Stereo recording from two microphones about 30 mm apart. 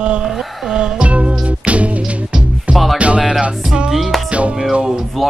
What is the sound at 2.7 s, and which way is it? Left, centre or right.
Music, centre.